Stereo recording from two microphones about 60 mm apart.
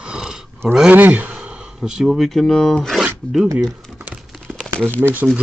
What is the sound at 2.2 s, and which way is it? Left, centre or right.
Speech, centre.